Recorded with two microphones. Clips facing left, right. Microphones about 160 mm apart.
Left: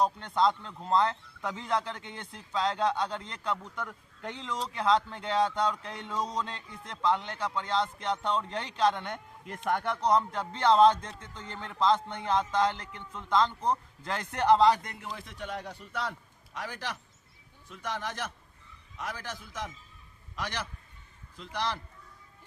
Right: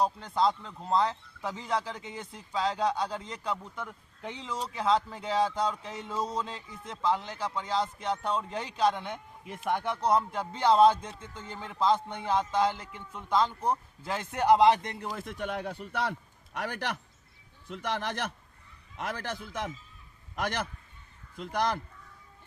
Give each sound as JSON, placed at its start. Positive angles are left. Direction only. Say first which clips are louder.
{"t": 0.0, "sound": "speech", "louder": "left 1 dB", "side_deg": 0}
{"t": 14.7, "sound": "a man's voice", "louder": "right 2 dB", "side_deg": -25}
{"t": 15.1, "sound": "a man's voice", "louder": "right 3 dB", "side_deg": -50}